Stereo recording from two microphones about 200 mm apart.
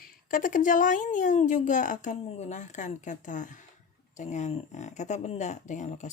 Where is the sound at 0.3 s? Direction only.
45° left (ahead or behind).